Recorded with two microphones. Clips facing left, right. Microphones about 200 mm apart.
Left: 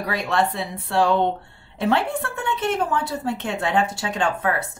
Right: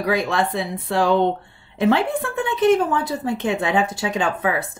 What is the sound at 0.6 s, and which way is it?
Speech, 90° right.